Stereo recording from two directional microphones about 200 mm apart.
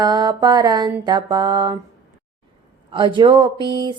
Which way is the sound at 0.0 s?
20° right (ahead or behind).